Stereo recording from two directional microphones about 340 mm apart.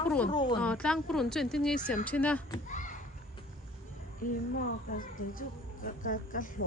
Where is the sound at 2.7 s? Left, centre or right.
Left.